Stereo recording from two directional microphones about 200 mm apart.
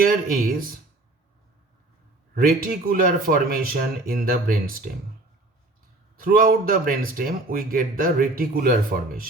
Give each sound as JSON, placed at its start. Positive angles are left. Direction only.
{"t": 0.0, "sound": "speech", "side_deg": -45}
{"t": 2.3, "sound": "speech", "side_deg": -45}
{"t": 6.1, "sound": "speech", "side_deg": -45}